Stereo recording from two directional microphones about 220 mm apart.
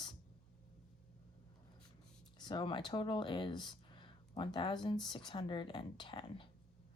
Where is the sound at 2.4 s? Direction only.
20° left (ahead or behind).